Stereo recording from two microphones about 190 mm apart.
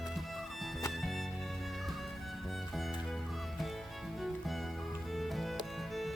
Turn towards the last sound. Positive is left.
turn(degrees=0)  # may be behind; listen again after turning